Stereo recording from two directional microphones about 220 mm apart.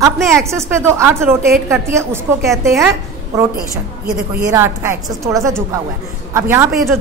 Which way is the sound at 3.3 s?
15° right (ahead or behind).